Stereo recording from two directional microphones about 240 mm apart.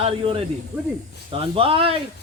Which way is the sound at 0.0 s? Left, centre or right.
Right.